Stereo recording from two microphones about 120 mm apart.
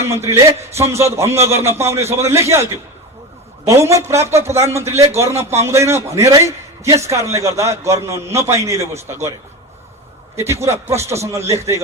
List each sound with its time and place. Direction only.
0.8 s a man's voice: 25° right (ahead or behind)
3.7 s a man's voice: 25° right (ahead or behind)
10.3 s a man's voice: 25° right (ahead or behind)